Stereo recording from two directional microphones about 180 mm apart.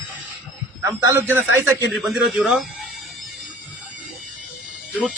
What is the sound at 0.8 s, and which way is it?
A man's voice, 15° right (ahead or behind).